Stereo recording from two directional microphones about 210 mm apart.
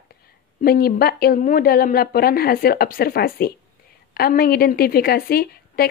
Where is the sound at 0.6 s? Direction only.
45° left (ahead or behind).